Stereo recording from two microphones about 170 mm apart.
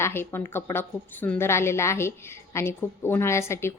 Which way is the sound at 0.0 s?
15° left (ahead or behind).